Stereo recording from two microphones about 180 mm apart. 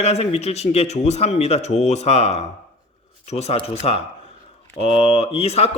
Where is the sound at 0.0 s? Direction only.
35° left (ahead or behind).